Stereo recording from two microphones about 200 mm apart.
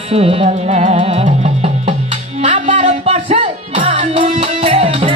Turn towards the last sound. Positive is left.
turn(degrees=-30)  # may be behind; listen again after turning